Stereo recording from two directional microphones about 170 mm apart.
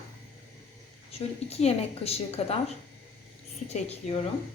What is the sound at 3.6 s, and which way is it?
Speech, 40° left (ahead or behind).